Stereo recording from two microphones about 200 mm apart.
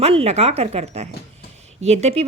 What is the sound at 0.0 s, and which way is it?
Speech, 30° right (ahead or behind).